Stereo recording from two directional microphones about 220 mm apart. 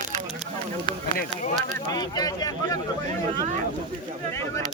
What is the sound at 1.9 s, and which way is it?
Speech, 15° left (ahead or behind).